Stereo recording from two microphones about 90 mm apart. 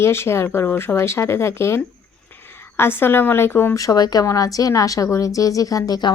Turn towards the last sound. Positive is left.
turn(degrees=50)  # may be behind; listen again after turning